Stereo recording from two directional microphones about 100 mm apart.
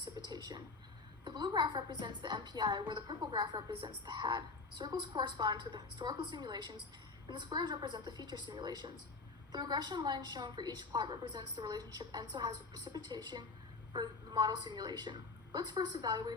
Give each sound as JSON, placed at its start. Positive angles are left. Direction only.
{"t": 0.0, "sound": "a woman's voice", "side_deg": -45}